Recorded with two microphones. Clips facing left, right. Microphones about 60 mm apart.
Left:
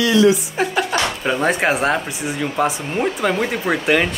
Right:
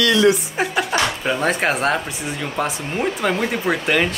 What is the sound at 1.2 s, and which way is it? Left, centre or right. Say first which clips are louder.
Speech: left 2 dB; centre.